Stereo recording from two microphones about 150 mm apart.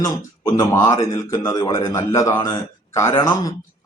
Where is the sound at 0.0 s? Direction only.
25° left (ahead or behind).